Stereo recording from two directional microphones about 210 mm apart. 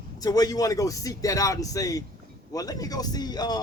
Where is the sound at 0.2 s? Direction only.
15° left (ahead or behind).